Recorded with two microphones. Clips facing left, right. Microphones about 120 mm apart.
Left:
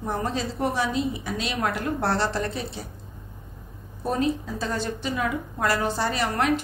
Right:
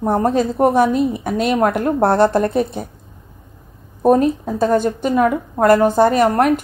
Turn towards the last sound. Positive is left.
turn(degrees=-50)  # may be behind; listen again after turning